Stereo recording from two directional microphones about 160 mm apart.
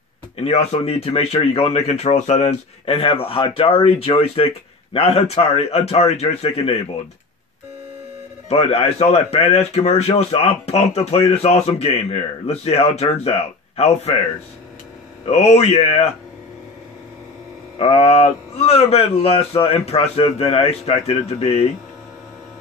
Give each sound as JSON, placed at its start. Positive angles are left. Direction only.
{"t": 0.4, "sound": "speech", "side_deg": 40}
{"t": 8.5, "sound": "speech", "side_deg": 40}
{"t": 15.2, "sound": "speech", "side_deg": 45}
{"t": 17.7, "sound": "speech", "side_deg": 35}